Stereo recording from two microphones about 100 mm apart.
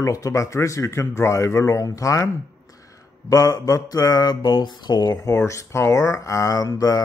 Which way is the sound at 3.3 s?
40° left (ahead or behind).